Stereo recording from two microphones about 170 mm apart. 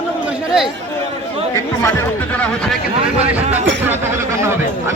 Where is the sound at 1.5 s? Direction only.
15° left (ahead or behind).